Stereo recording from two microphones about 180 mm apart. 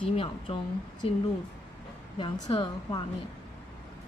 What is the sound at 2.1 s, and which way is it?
Speech, 30° left (ahead or behind).